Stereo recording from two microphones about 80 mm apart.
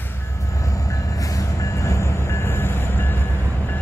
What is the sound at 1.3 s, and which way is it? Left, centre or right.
Train, left.